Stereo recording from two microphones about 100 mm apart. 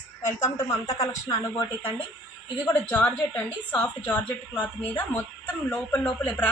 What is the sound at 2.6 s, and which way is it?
A woman's voice, 15° left (ahead or behind).